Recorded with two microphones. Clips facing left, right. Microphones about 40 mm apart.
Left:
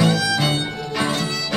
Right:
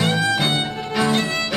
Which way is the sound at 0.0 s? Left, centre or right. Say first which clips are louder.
Left 1 dB; right.